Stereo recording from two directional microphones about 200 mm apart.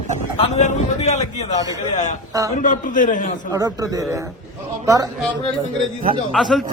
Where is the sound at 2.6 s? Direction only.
40° left (ahead or behind).